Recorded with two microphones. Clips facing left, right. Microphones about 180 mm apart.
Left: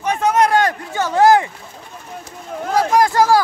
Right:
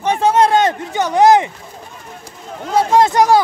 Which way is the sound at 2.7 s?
25° right (ahead or behind).